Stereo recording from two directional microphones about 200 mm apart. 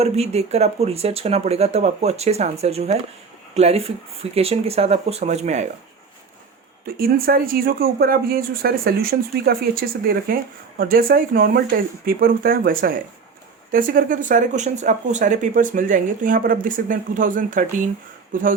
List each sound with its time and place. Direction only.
0.0 s speech: 30° right (ahead or behind)
6.8 s speech: 50° right (ahead or behind)